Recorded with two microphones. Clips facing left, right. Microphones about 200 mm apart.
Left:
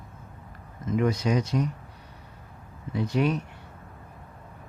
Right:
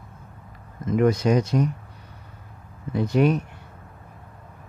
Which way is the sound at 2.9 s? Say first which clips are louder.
Right 5 dB; 50° right (ahead or behind).